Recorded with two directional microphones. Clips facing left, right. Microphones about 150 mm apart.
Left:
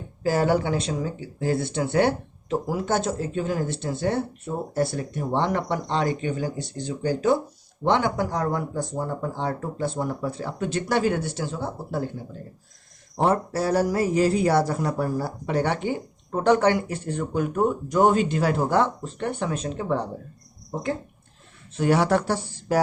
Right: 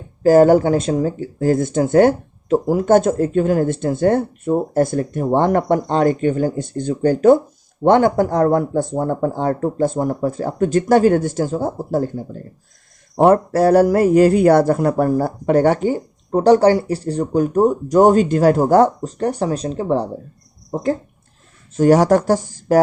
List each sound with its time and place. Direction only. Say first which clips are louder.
0.2 s speech: right 11 dB; 45° right (ahead or behind)
13.2 s speech: right 10 dB; 55° right (ahead or behind)